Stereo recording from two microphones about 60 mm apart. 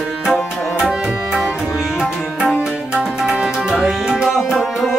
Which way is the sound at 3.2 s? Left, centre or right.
Centre.